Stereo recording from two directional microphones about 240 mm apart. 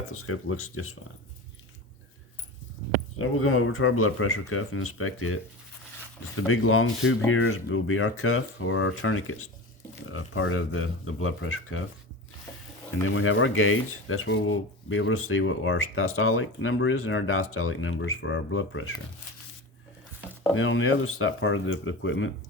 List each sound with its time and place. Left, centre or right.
0.1 s speech: left
3.2 s speech: left
13.0 s speech: left
20.6 s speech: left